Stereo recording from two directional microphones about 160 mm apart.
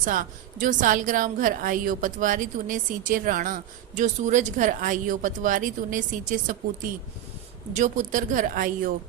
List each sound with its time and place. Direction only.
0.0 s a woman's voice: 55° right (ahead or behind)
7.8 s a woman's voice: 55° right (ahead or behind)